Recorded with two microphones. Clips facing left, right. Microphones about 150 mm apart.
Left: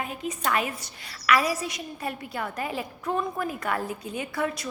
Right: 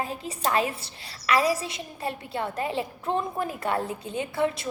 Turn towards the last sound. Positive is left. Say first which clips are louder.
# right 3 dB
turn(degrees=-25)  # may be behind; listen again after turning